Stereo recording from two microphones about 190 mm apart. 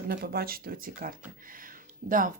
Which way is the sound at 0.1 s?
55° right (ahead or behind).